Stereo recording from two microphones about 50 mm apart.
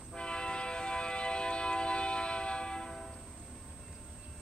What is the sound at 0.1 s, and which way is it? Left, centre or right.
Train, centre.